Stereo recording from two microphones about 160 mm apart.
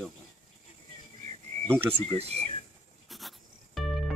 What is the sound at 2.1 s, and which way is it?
Speech, 40° right (ahead or behind).